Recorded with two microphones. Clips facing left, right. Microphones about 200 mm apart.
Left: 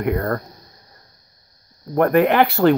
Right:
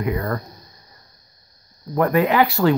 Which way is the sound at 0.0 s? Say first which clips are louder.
Left 2 dB; 55° left (ahead or behind).